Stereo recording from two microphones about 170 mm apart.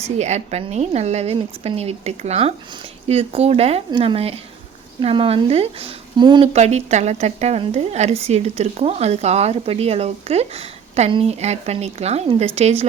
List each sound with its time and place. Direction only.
0.2 s a woman's voice: 40° right (ahead or behind); by 6.5 s 25° right (ahead or behind)
6.5 s a woman's voice: 40° right (ahead or behind)